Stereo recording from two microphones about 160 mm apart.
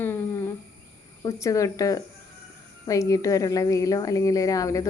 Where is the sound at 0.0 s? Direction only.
15° left (ahead or behind).